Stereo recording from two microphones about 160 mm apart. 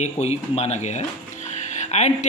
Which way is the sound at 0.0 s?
45° left (ahead or behind).